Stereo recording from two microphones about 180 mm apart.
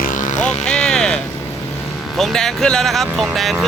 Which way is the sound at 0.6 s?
5° left (ahead or behind).